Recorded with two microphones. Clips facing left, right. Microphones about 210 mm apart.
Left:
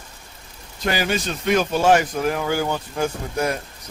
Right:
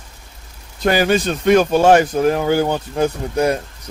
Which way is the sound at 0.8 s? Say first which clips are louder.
Right 7 dB; 50° right (ahead or behind).